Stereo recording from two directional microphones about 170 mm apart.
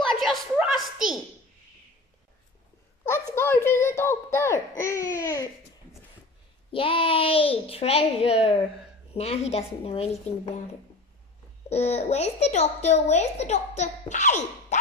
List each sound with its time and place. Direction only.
0.1 s a woman's voice: centre (ahead or behind)
3.3 s speech: 15° left (ahead or behind)
6.7 s a child's voice: 30° left (ahead or behind)
11.7 s a child's voice: 40° left (ahead or behind)